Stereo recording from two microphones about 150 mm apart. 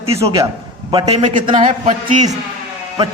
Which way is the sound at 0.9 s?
35° right (ahead or behind).